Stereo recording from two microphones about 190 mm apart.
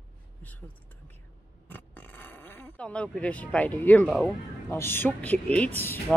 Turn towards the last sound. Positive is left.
turn(degrees=10)  # may be behind; listen again after turning